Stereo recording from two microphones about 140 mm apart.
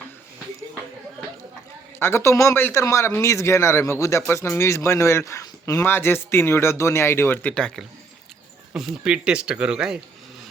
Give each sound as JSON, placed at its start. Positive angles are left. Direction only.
{"t": 2.0, "sound": "speech", "side_deg": 20}
{"t": 8.7, "sound": "speech", "side_deg": -5}